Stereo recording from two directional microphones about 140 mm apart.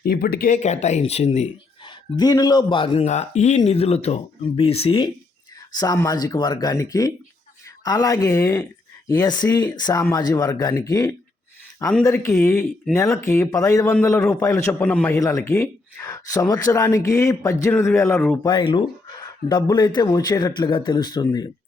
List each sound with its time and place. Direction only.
0.0 s speech: 90° left; by 1.5 s 50° left (ahead or behind)
2.1 s a man's voice: 30° left (ahead or behind)
3.1 s speech: 55° left (ahead or behind)
5.7 s a man's voice: 25° left (ahead or behind)
18.4 s a man's voice: 35° left (ahead or behind)